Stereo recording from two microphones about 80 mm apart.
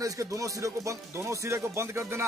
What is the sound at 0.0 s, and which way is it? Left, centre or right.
Speech, right.